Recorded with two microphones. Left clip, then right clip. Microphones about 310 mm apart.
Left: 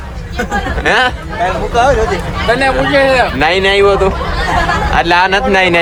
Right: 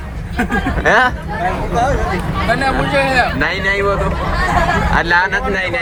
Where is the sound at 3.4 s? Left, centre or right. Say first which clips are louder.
Left 6 dB; centre.